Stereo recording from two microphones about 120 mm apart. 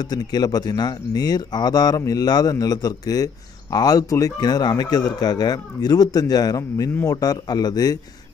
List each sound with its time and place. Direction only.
0.0 s speech: 35° left (ahead or behind)